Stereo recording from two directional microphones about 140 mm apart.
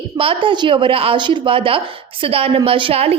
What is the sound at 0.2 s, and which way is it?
A woman's voice, 40° right (ahead or behind).